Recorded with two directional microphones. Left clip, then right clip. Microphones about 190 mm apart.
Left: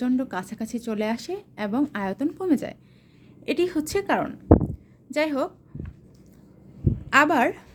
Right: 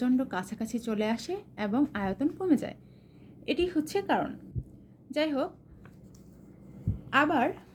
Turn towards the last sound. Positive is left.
turn(degrees=35)  # may be behind; listen again after turning